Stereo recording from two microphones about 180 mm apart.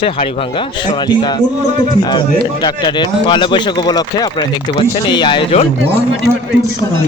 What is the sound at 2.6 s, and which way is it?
Speech, 25° left (ahead or behind).